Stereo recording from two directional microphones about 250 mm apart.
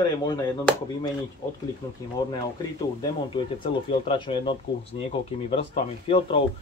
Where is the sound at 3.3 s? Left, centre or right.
Centre.